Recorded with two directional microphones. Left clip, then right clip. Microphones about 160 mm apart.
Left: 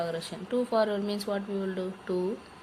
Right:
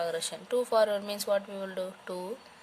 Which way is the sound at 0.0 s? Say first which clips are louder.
Right 1 dB; 60° right (ahead or behind).